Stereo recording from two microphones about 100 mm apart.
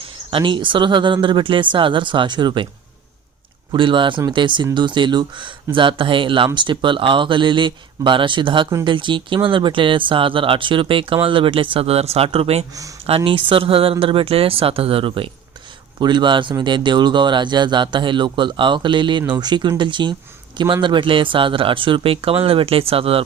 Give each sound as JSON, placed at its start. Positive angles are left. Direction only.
{"t": 0.3, "sound": "speech", "side_deg": -60}
{"t": 3.7, "sound": "speech", "side_deg": -55}
{"t": 13.1, "sound": "speech", "side_deg": -65}
{"t": 16.0, "sound": "speech", "side_deg": -50}